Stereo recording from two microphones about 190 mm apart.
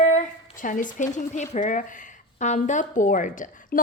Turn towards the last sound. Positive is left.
turn(degrees=45)  # may be behind; listen again after turning